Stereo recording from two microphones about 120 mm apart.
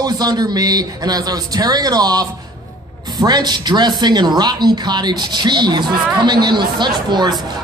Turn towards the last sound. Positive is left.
turn(degrees=-40)  # may be behind; listen again after turning